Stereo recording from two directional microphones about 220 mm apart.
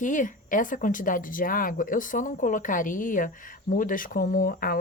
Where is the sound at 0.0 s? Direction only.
35° left (ahead or behind).